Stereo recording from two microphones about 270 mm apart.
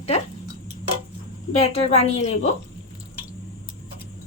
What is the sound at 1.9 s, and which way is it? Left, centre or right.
Speech, left.